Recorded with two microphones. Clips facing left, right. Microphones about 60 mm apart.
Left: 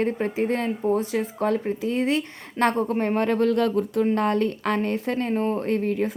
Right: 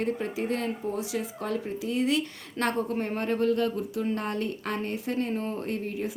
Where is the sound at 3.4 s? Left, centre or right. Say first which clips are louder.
Left 5 dB; left.